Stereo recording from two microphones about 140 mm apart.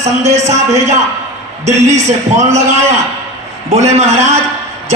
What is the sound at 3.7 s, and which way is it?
Speech, 50° right (ahead or behind).